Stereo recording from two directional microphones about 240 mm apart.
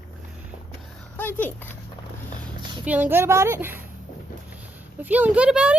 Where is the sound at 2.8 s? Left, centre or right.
Centre.